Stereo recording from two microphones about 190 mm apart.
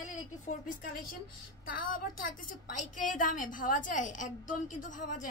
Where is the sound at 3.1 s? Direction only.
45° left (ahead or behind).